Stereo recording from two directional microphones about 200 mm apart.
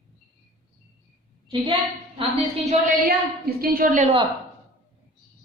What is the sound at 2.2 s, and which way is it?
Speech, 30° right (ahead or behind).